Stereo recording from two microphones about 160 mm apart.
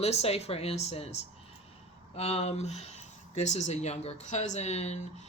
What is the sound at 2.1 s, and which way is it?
Speech, 40° left (ahead or behind).